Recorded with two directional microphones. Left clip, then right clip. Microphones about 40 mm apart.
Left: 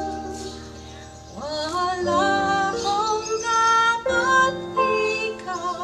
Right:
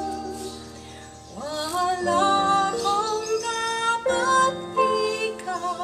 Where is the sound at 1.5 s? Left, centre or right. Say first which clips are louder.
Even; centre.